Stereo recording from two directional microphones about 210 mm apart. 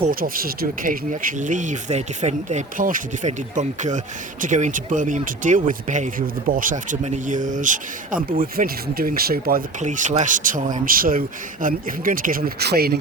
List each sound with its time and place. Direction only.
0.1 s speech: 45° right (ahead or behind)